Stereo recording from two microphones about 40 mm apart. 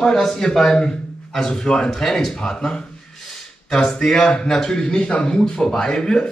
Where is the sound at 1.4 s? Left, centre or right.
Centre.